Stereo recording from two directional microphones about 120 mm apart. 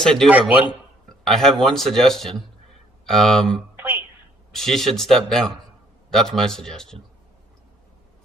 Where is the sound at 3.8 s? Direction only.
15° right (ahead or behind).